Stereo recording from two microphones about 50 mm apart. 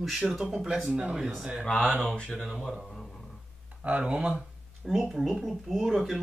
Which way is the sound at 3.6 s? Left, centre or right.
Right.